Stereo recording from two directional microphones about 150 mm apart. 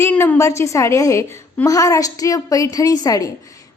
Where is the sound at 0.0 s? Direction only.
15° left (ahead or behind).